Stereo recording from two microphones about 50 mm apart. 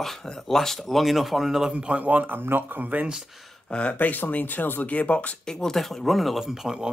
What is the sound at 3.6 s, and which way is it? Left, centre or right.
Speech, left.